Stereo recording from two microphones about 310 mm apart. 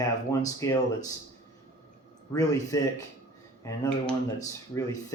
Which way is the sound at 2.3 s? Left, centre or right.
Centre.